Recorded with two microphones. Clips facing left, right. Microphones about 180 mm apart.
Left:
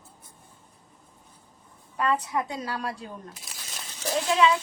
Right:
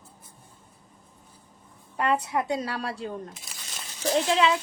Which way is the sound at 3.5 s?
Centre (ahead or behind).